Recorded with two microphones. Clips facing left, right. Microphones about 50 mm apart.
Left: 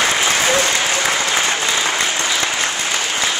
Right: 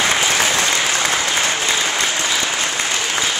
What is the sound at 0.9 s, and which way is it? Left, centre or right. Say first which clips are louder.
Applause: left 1 dB; centre.